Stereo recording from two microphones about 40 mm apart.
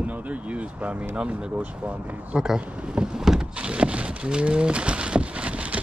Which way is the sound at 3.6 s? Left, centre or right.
Right.